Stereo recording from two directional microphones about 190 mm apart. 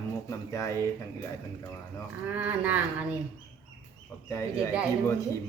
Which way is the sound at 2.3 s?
10° right (ahead or behind).